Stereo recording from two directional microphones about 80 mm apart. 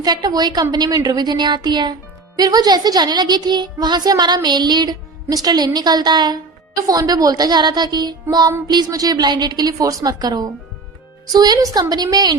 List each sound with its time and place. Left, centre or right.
0.0 s a woman's voice: right